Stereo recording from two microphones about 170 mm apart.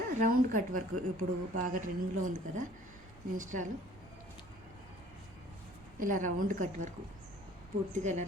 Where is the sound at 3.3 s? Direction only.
50° right (ahead or behind).